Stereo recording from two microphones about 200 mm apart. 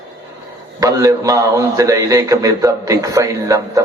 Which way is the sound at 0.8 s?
15° right (ahead or behind).